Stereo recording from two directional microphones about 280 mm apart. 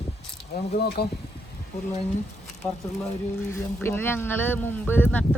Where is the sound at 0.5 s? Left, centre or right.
Left.